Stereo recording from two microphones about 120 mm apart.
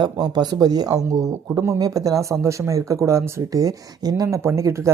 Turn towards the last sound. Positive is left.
turn(degrees=-25)  # may be behind; listen again after turning